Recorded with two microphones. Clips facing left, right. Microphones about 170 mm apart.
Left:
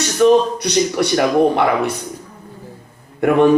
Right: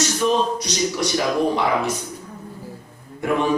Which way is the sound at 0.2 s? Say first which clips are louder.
Left 11 dB; 60° left (ahead or behind).